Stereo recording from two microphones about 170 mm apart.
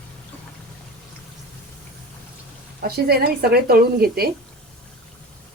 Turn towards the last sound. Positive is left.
turn(degrees=-65)  # may be behind; listen again after turning